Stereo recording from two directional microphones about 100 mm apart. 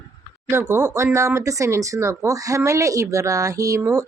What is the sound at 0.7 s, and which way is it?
Speech, 30° right (ahead or behind).